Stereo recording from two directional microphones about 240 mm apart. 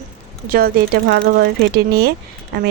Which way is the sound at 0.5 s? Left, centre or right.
Right.